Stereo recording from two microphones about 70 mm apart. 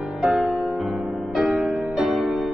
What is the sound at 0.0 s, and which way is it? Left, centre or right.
Music, centre.